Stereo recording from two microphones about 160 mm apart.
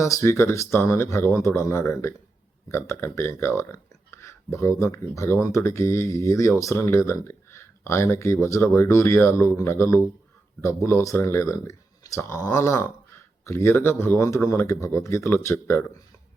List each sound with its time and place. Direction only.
0.0 s speech: 15° left (ahead or behind)